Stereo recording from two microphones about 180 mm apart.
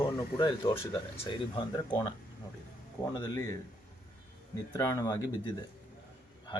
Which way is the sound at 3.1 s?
20° left (ahead or behind).